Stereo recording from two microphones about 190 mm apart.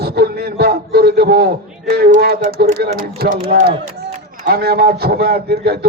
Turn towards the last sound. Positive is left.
turn(degrees=-55)  # may be behind; listen again after turning